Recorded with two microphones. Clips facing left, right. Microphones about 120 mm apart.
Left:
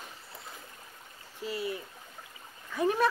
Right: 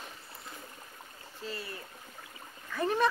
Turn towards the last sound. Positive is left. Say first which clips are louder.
# left 2 dB
turn(degrees=10)  # may be behind; listen again after turning